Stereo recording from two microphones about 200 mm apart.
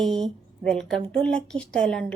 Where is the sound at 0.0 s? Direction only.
Centre (ahead or behind).